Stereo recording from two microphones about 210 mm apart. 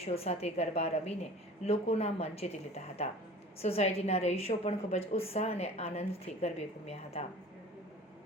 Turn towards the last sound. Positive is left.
turn(degrees=30)  # may be behind; listen again after turning